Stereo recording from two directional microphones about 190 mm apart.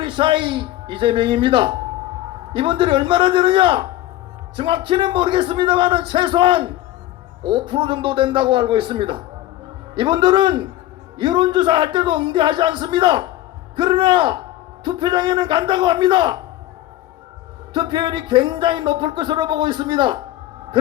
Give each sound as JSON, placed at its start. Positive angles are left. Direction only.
{"t": 0.0, "sound": "speech", "side_deg": -25}
{"t": 17.7, "sound": "speech", "side_deg": -25}